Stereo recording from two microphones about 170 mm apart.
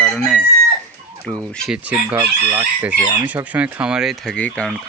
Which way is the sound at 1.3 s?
5° left (ahead or behind).